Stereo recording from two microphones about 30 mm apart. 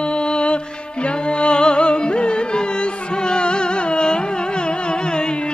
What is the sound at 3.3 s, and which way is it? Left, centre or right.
Carnatic music, left.